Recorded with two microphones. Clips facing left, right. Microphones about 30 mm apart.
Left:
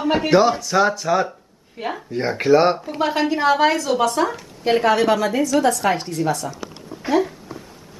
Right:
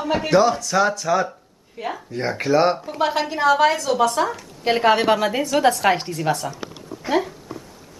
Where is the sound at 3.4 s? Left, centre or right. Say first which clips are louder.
Right 2 dB; centre.